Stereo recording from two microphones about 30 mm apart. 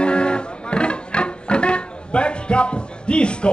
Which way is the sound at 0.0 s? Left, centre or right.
Left.